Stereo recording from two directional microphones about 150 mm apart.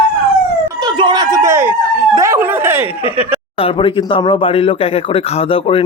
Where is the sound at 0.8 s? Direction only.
30° right (ahead or behind); by 2.9 s 15° right (ahead or behind).